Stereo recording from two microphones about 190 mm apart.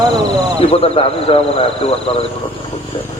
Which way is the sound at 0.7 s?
30° left (ahead or behind).